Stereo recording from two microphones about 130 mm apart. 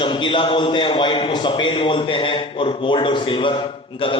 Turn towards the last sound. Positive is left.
turn(degrees=40)  # may be behind; listen again after turning